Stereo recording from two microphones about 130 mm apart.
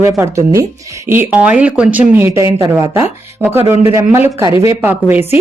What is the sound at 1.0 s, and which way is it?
Speech, 15° right (ahead or behind).